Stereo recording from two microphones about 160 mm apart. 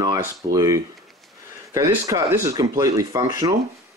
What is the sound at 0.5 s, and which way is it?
Speech, 20° right (ahead or behind).